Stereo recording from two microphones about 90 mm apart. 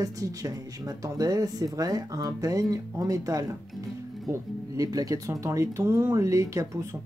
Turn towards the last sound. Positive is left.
turn(degrees=-35)  # may be behind; listen again after turning